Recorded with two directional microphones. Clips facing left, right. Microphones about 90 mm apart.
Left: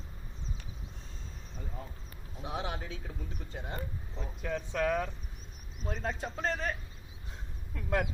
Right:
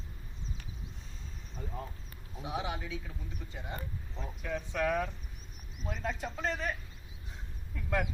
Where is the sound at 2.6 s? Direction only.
35° left (ahead or behind).